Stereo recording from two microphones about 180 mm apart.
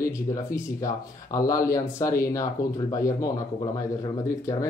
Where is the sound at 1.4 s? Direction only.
20° left (ahead or behind).